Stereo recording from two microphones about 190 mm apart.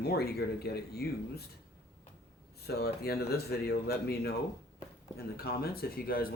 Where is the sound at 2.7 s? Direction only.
55° left (ahead or behind).